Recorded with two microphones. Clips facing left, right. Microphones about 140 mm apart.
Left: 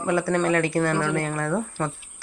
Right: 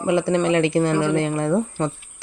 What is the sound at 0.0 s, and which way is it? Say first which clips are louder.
Speech: right 3 dB; 20° right (ahead or behind).